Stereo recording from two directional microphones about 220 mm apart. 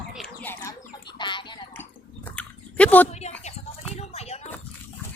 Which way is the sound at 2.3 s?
5° left (ahead or behind).